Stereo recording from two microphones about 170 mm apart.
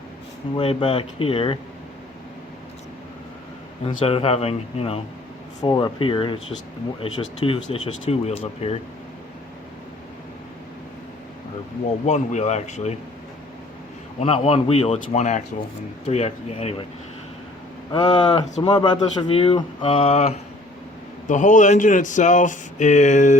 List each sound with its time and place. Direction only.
0.5 s speech: 30° left (ahead or behind)
3.8 s speech: 35° left (ahead or behind)
12.0 s speech: 40° left (ahead or behind)
14.2 s speech: 35° left (ahead or behind)
17.9 s speech: 25° left (ahead or behind); by 23.4 s 45° left (ahead or behind)